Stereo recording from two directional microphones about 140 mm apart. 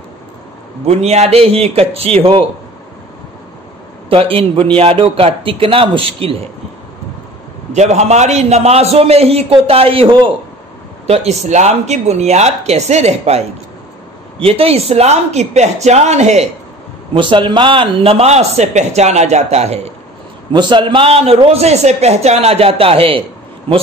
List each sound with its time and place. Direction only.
0.8 s a man's voice: 50° right (ahead or behind)
4.1 s a man's voice: 40° right (ahead or behind)
7.7 s a man's voice: 55° right (ahead or behind); by 10.3 s 40° right (ahead or behind)
11.1 s a man's voice: 55° right (ahead or behind)
14.4 s a man's voice: 45° right (ahead or behind)
17.1 s a man's voice: 40° right (ahead or behind)
20.5 s a man's voice: 35° right (ahead or behind)